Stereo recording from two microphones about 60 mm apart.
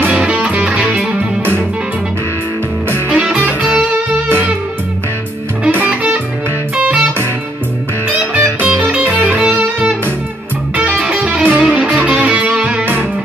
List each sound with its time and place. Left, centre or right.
0.1 s music: centre
3.1 s music: centre
5.9 s music: right
8.2 s music: right